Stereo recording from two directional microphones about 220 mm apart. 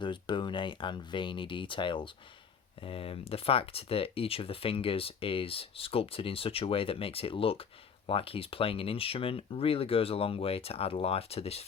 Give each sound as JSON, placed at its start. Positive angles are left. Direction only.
{"t": 0.0, "sound": "speech", "side_deg": 20}